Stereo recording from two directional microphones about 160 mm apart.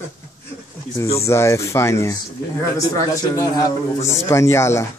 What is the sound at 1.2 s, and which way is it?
A man's voice, 15° left (ahead or behind).